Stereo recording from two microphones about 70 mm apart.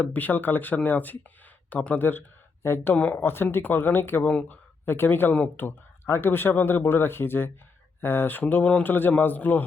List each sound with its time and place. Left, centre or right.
0.0 s a man's voice: left
2.9 s speech: centre
3.2 s speech: left
4.3 s a man's voice: centre
4.9 s a man's voice: left